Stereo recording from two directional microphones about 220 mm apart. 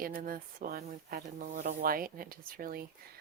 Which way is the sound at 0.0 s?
40° right (ahead or behind).